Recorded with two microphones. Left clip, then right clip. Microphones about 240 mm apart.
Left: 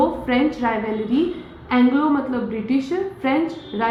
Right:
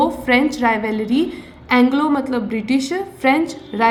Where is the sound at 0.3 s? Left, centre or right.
Right.